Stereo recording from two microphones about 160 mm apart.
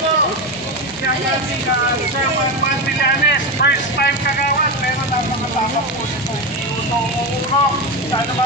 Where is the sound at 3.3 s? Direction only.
90° left.